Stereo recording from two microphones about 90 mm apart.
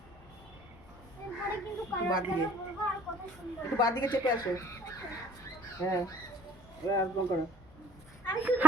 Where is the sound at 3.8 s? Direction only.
50° left (ahead or behind).